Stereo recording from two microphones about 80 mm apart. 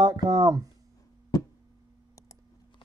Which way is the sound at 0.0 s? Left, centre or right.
Right.